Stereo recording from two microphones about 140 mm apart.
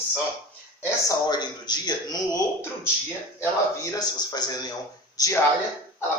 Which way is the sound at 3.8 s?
25° left (ahead or behind).